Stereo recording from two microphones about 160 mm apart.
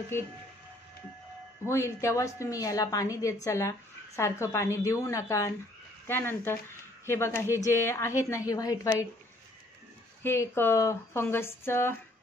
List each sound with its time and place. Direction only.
0.1 s a woman's voice: 15° left (ahead or behind)
1.7 s a woman's voice: 15° left (ahead or behind)
10.2 s a woman's voice: 15° left (ahead or behind)